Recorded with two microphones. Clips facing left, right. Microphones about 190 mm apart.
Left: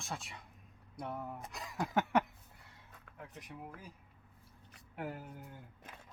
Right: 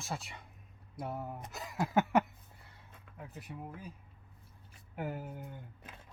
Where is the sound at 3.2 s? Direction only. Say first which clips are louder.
Right 3 dB; 5° right (ahead or behind).